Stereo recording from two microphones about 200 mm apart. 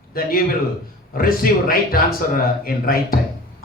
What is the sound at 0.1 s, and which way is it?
A man's voice, 45° left (ahead or behind).